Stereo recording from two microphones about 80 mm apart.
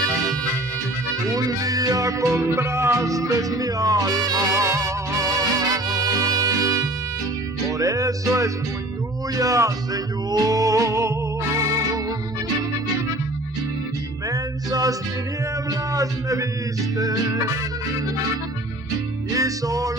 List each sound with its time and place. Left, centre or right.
1.3 s music: right
14.3 s music: right
15.9 s speech: right
17.0 s music: right
19.3 s music: right